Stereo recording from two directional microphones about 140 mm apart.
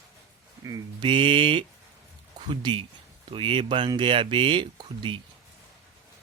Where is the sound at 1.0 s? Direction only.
35° right (ahead or behind).